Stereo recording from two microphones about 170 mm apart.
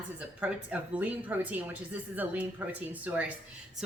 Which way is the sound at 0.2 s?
10° right (ahead or behind).